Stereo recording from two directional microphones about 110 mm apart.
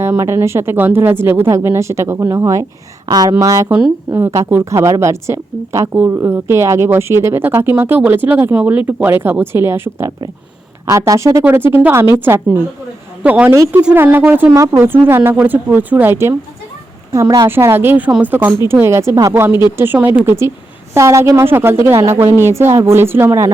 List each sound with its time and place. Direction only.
0.0 s speech: 25° right (ahead or behind)
3.7 s a woman's voice: 15° right (ahead or behind)
13.5 s speech: 25° right (ahead or behind)
14.5 s speech: 30° right (ahead or behind)